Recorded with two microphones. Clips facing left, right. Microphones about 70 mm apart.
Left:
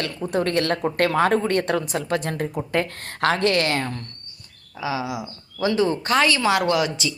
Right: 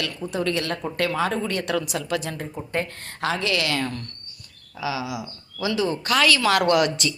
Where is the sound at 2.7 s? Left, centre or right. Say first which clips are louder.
Left 4 dB; left.